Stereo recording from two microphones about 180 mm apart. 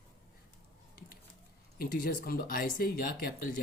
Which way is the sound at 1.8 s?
55° left (ahead or behind).